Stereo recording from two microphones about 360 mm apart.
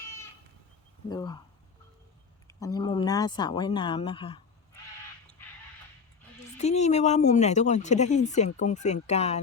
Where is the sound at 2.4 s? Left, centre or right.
Centre.